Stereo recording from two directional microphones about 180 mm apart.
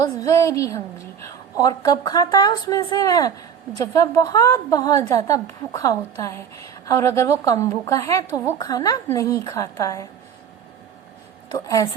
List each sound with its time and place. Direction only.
0.0 s a woman's voice: 20° left (ahead or behind)
11.5 s a woman's voice: 20° left (ahead or behind)